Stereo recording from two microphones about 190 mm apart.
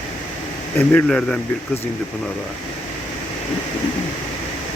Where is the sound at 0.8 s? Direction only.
5° left (ahead or behind).